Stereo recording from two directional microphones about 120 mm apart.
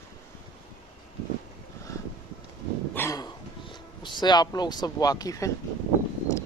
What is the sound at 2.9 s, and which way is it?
Dog, 20° left (ahead or behind).